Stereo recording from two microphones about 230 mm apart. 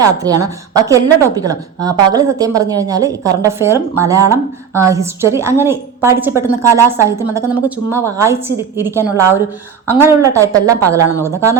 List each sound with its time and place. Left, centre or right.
0.0 s speech: centre